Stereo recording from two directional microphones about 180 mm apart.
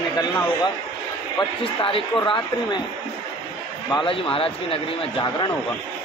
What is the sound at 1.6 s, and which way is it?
Speech, 30° left (ahead or behind).